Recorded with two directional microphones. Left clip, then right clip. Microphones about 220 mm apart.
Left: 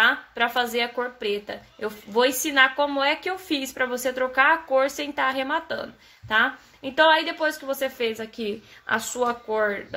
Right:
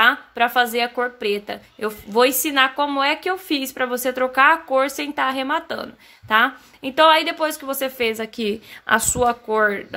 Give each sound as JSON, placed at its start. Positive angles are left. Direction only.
{"t": 0.0, "sound": "speech", "side_deg": -25}